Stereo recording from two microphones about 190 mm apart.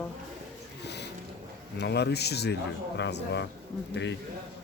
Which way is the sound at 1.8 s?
60° left (ahead or behind).